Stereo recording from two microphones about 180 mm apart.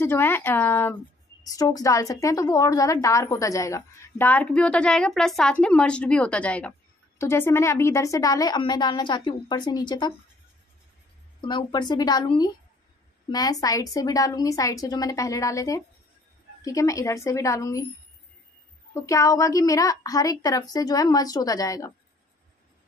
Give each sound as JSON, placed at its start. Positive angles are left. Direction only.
{"t": 0.0, "sound": "a woman's voice", "side_deg": 10}
{"t": 11.4, "sound": "a woman's voice", "side_deg": 25}
{"t": 19.0, "sound": "a woman's voice", "side_deg": 20}